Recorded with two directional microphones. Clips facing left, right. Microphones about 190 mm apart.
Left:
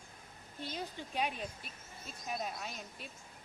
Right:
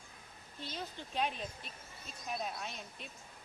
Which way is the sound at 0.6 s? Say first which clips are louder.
Left 2 dB; 10° left (ahead or behind).